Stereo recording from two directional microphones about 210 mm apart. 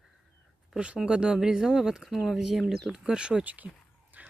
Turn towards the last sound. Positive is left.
turn(degrees=-5)  # may be behind; listen again after turning